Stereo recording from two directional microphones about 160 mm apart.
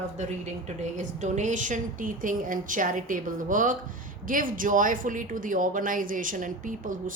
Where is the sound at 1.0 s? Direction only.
50° right (ahead or behind).